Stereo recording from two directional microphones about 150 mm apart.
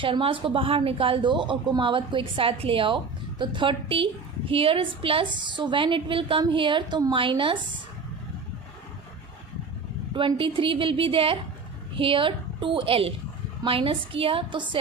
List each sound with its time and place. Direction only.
0.0 s a woman's voice: 35° right (ahead or behind)
10.2 s a woman's voice: 35° right (ahead or behind)